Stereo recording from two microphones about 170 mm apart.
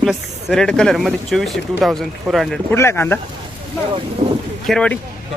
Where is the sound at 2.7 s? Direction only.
15° left (ahead or behind).